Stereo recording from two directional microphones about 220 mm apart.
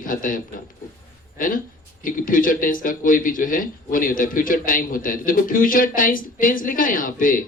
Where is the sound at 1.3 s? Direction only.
40° left (ahead or behind).